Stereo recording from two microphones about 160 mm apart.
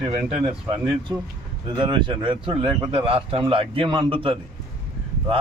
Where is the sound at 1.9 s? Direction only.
30° right (ahead or behind).